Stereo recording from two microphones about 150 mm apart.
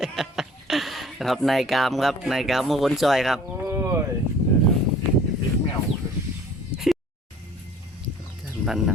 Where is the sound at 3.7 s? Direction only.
15° right (ahead or behind).